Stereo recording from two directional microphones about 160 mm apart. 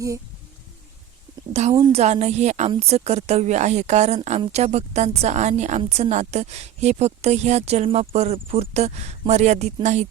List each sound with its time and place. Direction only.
1.9 s a woman's voice: 40° right (ahead or behind)